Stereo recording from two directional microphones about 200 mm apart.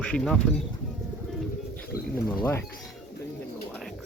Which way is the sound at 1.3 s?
5° left (ahead or behind).